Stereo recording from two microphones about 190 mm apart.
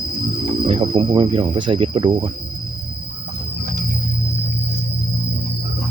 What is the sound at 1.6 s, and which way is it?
Speech, 25° right (ahead or behind).